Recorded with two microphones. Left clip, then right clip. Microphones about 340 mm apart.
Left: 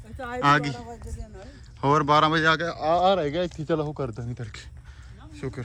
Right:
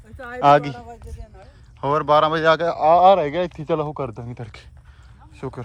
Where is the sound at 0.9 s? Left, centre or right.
Right.